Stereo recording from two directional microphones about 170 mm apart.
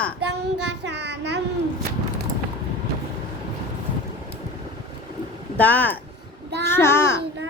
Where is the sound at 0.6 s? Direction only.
90° right.